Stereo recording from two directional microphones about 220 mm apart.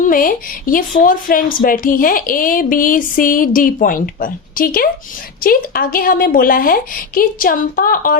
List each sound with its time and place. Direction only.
0.0 s a woman's voice: 40° left (ahead or behind)